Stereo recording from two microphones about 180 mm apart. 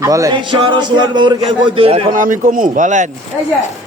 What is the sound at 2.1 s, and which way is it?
Speech, 45° right (ahead or behind).